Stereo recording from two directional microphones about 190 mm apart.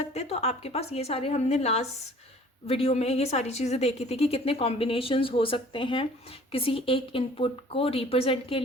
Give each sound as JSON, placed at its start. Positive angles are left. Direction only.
{"t": 0.1, "sound": "a woman's voice", "side_deg": 35}